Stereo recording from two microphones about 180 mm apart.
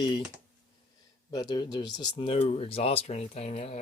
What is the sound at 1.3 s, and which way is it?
Speech, 25° left (ahead or behind).